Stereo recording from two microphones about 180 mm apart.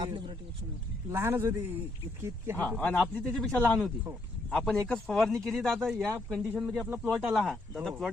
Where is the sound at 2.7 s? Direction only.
5° left (ahead or behind).